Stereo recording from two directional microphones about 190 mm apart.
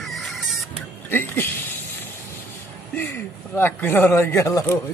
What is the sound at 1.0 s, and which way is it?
Speech, 10° left (ahead or behind).